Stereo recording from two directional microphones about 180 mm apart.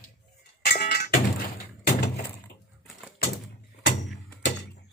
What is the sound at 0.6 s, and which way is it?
Music, 50° left (ahead or behind).